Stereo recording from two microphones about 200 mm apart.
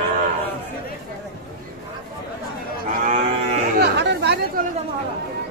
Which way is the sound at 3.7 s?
60° right (ahead or behind).